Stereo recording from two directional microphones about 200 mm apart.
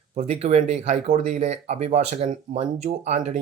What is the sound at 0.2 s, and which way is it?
Speech, 30° right (ahead or behind).